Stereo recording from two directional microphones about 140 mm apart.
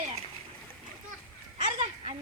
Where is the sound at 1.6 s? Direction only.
55° right (ahead or behind).